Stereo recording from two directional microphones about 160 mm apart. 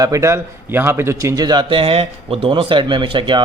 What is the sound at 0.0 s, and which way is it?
A man's voice, 20° right (ahead or behind).